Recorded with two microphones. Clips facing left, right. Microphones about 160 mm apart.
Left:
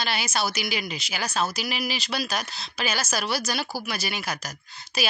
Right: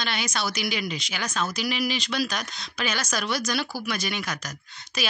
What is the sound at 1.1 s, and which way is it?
Speech, 35° left (ahead or behind).